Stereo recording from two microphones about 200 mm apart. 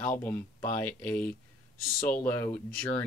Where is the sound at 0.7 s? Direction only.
10° left (ahead or behind).